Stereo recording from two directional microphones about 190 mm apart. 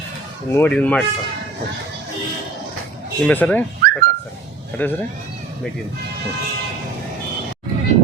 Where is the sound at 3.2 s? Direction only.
10° left (ahead or behind).